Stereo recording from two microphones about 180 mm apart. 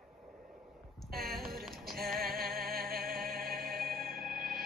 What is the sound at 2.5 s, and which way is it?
Music, 55° right (ahead or behind).